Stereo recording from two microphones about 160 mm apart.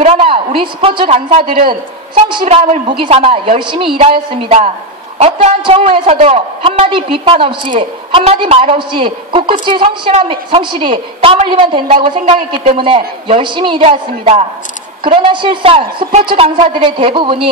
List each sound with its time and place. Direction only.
0.0 s a woman's voice: 35° right (ahead or behind)